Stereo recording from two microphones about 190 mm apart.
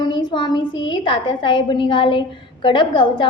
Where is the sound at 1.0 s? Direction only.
25° left (ahead or behind).